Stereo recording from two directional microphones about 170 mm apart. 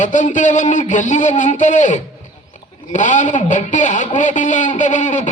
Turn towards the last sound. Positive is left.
turn(degrees=45)  # may be behind; listen again after turning